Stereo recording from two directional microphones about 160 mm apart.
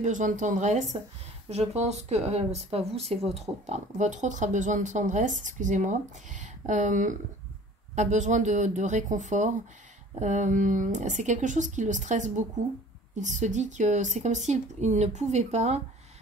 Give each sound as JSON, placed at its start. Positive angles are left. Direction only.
{"t": 0.0, "sound": "speech", "side_deg": -50}